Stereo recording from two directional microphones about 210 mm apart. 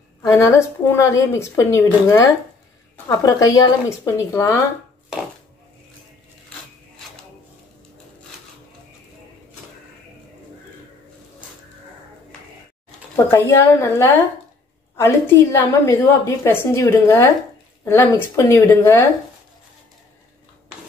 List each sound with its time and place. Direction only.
0.2 s a woman's voice: 15° left (ahead or behind)
13.1 s a woman's voice: 15° left (ahead or behind)